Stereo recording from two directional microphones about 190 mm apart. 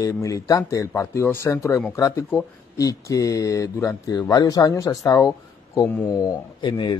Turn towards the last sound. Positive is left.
turn(degrees=20)  # may be behind; listen again after turning